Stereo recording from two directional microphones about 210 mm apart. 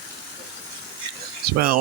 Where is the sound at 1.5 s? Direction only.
45° right (ahead or behind).